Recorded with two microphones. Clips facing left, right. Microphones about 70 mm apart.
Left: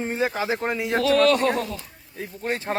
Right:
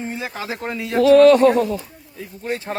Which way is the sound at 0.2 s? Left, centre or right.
Left.